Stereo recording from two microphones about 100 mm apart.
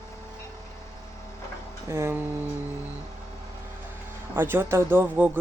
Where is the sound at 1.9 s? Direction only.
25° right (ahead or behind).